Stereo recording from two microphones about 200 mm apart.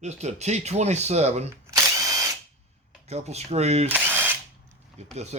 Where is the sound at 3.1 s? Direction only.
35° right (ahead or behind).